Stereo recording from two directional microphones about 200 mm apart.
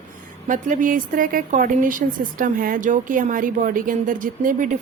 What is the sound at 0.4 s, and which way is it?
A woman's voice, 40° right (ahead or behind).